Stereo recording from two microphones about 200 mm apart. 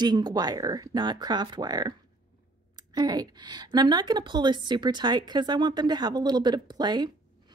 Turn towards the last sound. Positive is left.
turn(degrees=-20)  # may be behind; listen again after turning